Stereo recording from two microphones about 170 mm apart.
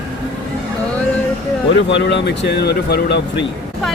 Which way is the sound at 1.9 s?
90° left.